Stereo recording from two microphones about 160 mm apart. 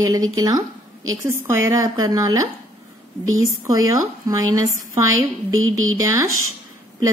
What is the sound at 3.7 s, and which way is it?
A woman's voice, 20° right (ahead or behind).